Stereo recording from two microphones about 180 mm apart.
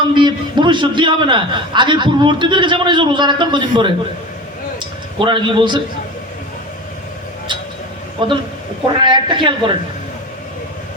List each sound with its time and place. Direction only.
0.0 s a man's voice: 25° right (ahead or behind)
5.2 s a man's voice: 25° right (ahead or behind)
8.2 s a man's voice: 25° right (ahead or behind)